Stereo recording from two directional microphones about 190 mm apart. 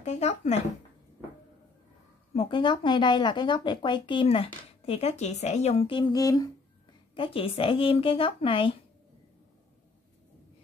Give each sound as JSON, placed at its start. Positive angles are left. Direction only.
{"t": 0.0, "sound": "speech", "side_deg": 35}
{"t": 2.3, "sound": "speech", "side_deg": 25}